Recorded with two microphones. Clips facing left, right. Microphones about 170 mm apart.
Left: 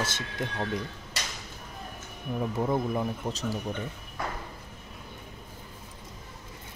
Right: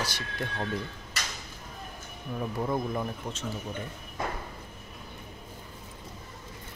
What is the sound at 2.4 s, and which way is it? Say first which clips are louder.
Speech: left 2 dB; 15° left (ahead or behind).